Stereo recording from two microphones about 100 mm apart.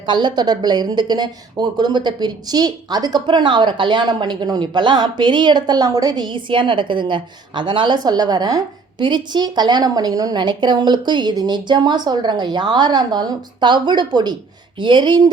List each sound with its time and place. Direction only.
0.0 s a woman's voice: 50° right (ahead or behind)